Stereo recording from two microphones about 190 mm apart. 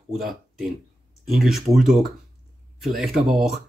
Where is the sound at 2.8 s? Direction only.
Centre (ahead or behind).